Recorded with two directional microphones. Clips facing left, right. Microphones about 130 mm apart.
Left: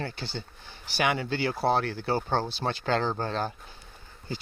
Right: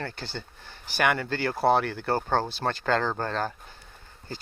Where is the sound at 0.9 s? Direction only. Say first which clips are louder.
Right 2 dB; 50° right (ahead or behind).